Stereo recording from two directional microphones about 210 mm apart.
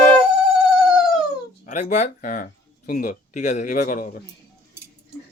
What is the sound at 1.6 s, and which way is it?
Speech, 35° left (ahead or behind).